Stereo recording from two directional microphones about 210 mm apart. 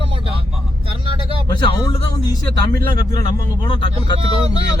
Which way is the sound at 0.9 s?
25° right (ahead or behind).